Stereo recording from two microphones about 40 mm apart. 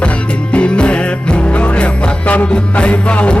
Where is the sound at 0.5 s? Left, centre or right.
Left.